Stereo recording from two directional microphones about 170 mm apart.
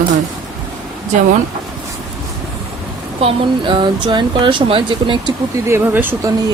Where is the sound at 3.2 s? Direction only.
30° right (ahead or behind).